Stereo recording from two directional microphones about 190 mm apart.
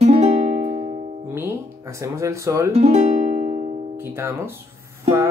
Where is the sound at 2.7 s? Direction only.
35° right (ahead or behind).